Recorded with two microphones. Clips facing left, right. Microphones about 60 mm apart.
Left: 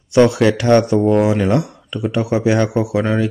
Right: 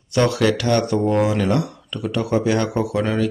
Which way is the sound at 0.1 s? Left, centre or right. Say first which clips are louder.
Left 5 dB; centre.